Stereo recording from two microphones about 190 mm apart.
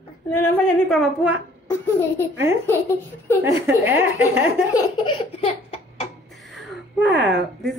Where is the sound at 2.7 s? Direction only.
10° left (ahead or behind).